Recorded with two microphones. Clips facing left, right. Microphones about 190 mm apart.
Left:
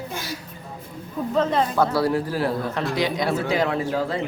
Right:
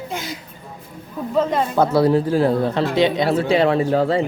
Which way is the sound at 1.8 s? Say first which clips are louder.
Right 9 dB; 20° right (ahead or behind).